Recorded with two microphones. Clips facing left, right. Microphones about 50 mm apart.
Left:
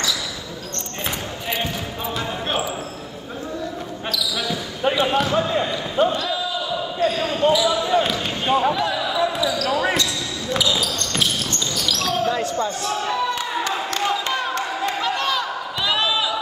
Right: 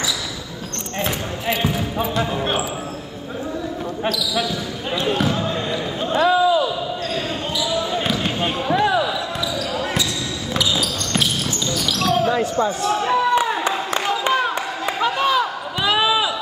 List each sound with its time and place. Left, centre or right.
4.9 s basketball bounce: centre
6.1 s a sound: right
7.5 s basketball bounce: centre
8.7 s basketball bounce: right
9.0 s basketball bounce: centre
9.7 s basketball bounce: left
10.5 s basketball bounce: centre
14.0 s a sound: centre